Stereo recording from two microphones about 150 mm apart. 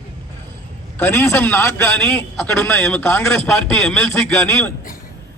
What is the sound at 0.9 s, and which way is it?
A man's voice, 15° left (ahead or behind).